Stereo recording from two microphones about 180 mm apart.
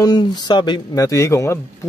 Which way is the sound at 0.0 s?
20° left (ahead or behind).